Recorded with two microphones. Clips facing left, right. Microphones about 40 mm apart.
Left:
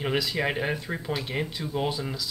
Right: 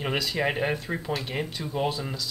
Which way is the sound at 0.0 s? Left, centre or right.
Centre.